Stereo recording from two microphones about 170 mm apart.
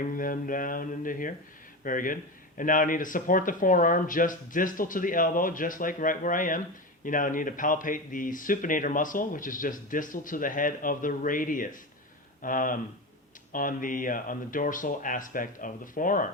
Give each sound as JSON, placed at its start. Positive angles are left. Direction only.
{"t": 0.1, "sound": "speech", "side_deg": 55}